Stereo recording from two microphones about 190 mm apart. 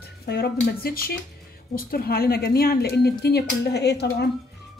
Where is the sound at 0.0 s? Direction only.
55° left (ahead or behind).